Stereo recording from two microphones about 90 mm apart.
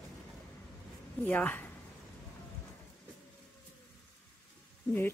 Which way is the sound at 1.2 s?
20° left (ahead or behind).